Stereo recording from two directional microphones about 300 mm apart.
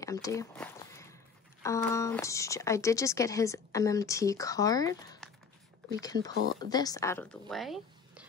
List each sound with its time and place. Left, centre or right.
0.0 s a sound: centre
1.6 s speech: centre
6.3 s speech: right
6.6 s speech: centre